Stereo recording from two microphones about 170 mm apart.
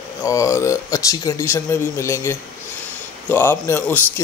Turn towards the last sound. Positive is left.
turn(degrees=15)  # may be behind; listen again after turning